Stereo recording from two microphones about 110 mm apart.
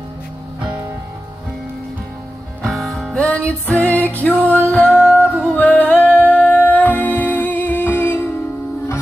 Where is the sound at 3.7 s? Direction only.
25° right (ahead or behind).